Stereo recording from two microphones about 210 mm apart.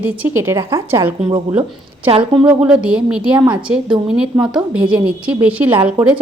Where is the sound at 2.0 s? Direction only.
25° right (ahead or behind).